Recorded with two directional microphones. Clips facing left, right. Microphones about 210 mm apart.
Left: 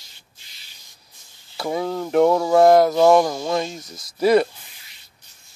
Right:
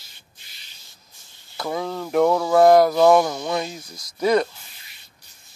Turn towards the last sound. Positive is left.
turn(degrees=5)  # may be behind; listen again after turning